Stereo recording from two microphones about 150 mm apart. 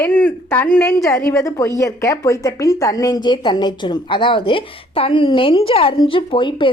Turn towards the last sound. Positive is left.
turn(degrees=35)  # may be behind; listen again after turning